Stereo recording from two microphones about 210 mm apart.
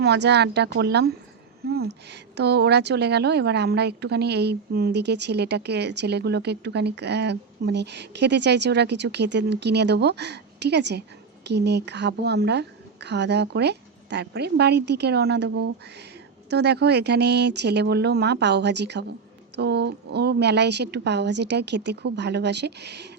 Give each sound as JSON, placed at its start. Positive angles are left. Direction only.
{"t": 0.0, "sound": "a woman's voice", "side_deg": -55}